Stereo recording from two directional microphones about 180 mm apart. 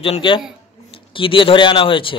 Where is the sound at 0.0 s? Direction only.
30° left (ahead or behind).